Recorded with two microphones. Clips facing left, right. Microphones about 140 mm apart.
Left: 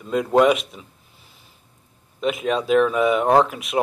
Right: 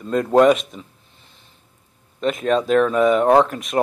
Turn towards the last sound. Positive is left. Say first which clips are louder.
# right 2 dB
turn(degrees=5)  # may be behind; listen again after turning